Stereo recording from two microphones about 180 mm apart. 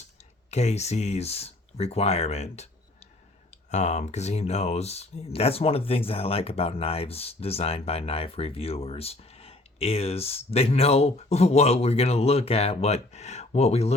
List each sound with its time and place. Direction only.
0.5 s speech: 35° left (ahead or behind)
3.7 s speech: 40° left (ahead or behind)